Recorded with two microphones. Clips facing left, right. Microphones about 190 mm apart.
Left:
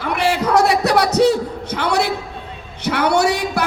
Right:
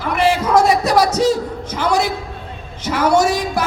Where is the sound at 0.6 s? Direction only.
65° left (ahead or behind).